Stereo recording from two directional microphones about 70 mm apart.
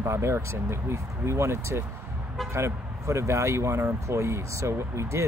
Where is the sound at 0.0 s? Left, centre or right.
Right.